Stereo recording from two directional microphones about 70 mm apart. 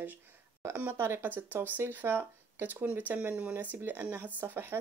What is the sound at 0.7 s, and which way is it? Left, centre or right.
Speech, right.